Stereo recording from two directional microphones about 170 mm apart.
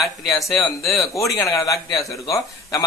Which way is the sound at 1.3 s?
20° left (ahead or behind).